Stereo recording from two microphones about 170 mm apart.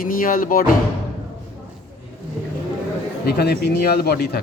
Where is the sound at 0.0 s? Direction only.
55° left (ahead or behind).